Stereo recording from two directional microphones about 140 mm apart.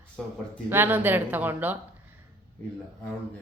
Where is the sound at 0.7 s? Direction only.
15° right (ahead or behind).